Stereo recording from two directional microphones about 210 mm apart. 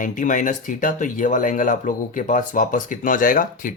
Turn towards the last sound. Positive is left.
turn(degrees=40)  # may be behind; listen again after turning